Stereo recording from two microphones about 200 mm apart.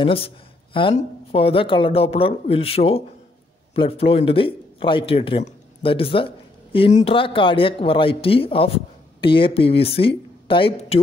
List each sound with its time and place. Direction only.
0.0 s speech: 30° left (ahead or behind)